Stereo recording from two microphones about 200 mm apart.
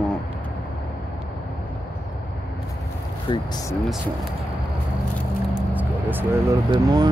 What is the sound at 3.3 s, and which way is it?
Speech, 25° left (ahead or behind).